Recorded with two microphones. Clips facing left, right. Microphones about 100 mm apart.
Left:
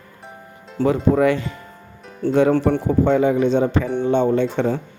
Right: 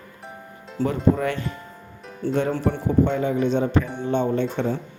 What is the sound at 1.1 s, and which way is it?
Speech, 90° left.